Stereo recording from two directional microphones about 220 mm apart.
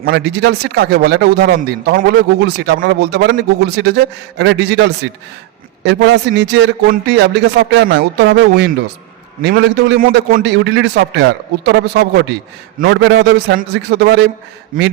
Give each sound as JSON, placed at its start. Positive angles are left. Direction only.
{"t": 0.0, "sound": "a man's voice", "side_deg": -50}